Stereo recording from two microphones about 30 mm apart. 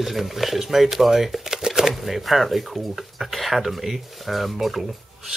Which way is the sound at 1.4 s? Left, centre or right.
Centre.